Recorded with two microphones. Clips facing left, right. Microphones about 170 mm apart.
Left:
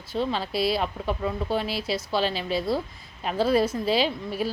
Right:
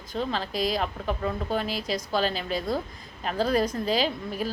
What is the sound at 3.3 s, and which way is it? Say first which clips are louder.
Speech: left 2 dB; 5° left (ahead or behind).